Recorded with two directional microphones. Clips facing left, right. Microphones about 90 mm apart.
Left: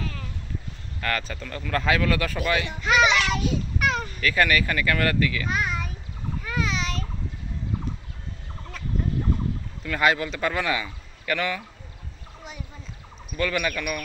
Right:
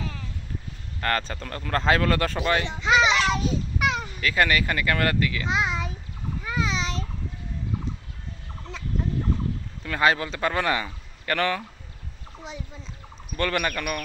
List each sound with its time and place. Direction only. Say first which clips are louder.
1.0 s speech: right 2 dB; 35° right (ahead or behind)
2.3 s a child's voice: right 1 dB; 25° right (ahead or behind)
3.8 s a sound: left 1 dB; 15° right (ahead or behind)
4.2 s speech: even; 25° right (ahead or behind)
6.4 s babbling: right 1 dB; 25° right (ahead or behind)
9.8 s speech: even; 30° right (ahead or behind)
13.4 s speech: even; 40° right (ahead or behind)